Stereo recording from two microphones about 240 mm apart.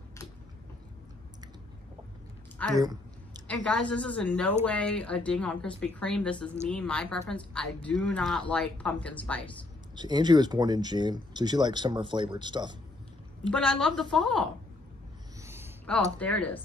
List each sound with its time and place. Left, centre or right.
2.8 s a sound: centre
3.4 s speech: centre
9.9 s speech: centre
13.5 s speech: centre
15.4 s a sound: centre
15.9 s speech: centre